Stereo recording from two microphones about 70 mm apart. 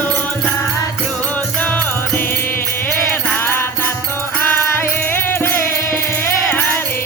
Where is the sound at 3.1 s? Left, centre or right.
Left.